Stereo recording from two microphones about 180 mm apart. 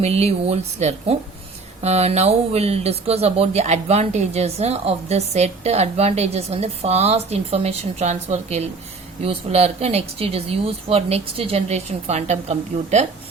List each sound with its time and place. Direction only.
0.0 s speech: 35° right (ahead or behind)